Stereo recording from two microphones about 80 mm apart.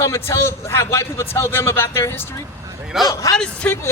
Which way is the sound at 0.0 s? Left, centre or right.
Left.